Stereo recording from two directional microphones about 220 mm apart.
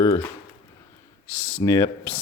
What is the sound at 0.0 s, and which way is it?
Speech, 15° left (ahead or behind).